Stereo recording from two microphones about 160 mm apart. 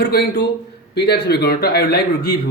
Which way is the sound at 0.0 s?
90° left.